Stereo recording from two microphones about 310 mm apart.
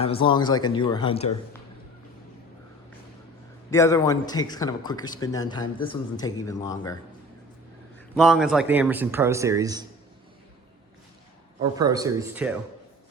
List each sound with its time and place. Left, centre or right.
0.0 s speech: centre
3.7 s speech: centre
7.9 s a man's voice: centre
11.8 s speech: centre